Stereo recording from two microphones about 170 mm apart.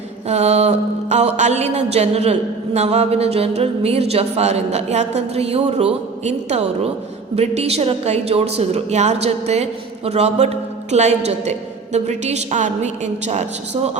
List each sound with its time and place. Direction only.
0.3 s a man's voice: 40° right (ahead or behind)